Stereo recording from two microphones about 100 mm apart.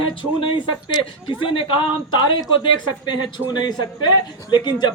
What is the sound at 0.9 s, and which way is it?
Speech, 40° left (ahead or behind).